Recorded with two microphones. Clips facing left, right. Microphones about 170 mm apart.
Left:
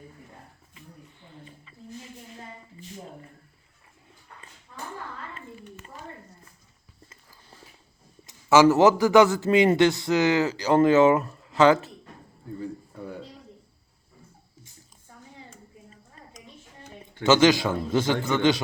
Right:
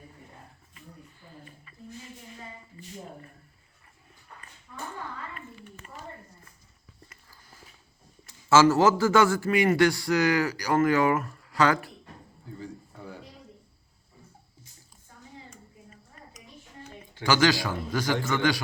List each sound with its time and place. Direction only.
1.2 s a sound: 20° left (ahead or behind)
8.3 s a man's voice: 20° left (ahead or behind)
17.2 s a man's voice: 20° left (ahead or behind)